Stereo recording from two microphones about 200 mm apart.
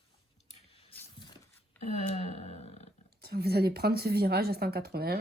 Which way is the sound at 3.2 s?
55° right (ahead or behind).